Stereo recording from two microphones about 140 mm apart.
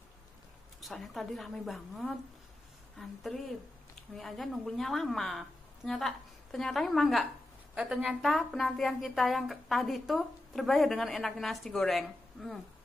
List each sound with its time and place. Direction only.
0.7 s speech: centre (ahead or behind)